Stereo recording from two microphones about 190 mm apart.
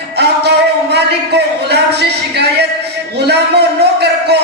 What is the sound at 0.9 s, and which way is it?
Speech, 60° right (ahead or behind).